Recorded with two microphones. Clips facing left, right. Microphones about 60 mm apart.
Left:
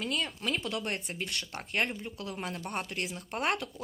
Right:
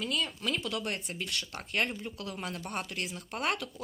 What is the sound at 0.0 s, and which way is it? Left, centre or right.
Speech, left.